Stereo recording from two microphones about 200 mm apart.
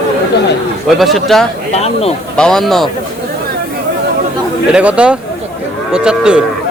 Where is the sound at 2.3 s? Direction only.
5° left (ahead or behind).